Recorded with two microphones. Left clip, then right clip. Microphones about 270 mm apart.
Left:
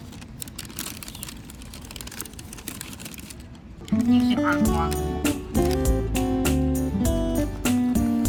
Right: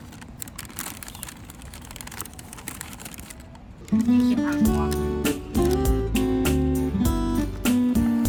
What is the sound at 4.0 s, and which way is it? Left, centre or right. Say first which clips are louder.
Music: left 1 dB; centre.